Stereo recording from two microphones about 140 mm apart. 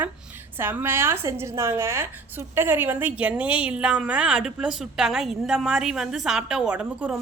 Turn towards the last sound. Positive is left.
turn(degrees=-10)  # may be behind; listen again after turning